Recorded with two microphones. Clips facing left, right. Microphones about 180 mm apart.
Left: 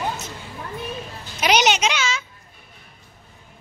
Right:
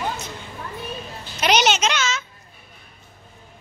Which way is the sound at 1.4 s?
10° left (ahead or behind).